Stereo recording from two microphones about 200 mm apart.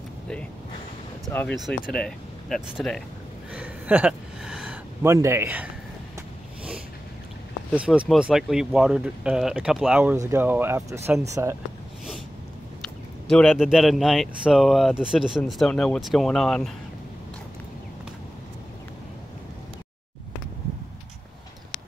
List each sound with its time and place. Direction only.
1.3 s speech: 10° left (ahead or behind)
3.5 s a sound: 5° right (ahead or behind)
5.0 s speech: 15° right (ahead or behind)
7.7 s speech: 5° right (ahead or behind)
13.3 s speech: centre (ahead or behind)